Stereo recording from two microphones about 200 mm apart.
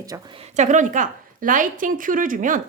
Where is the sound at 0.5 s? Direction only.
35° right (ahead or behind).